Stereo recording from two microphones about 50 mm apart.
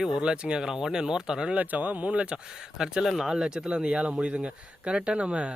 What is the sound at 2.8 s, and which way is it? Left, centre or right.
Speech, centre.